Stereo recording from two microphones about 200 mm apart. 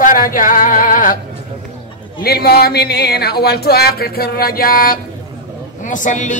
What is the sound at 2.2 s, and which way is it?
Speech, 50° left (ahead or behind).